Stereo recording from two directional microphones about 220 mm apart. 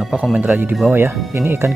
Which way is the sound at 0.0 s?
5° right (ahead or behind).